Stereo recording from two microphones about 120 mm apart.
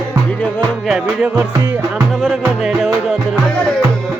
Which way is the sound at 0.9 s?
5° right (ahead or behind).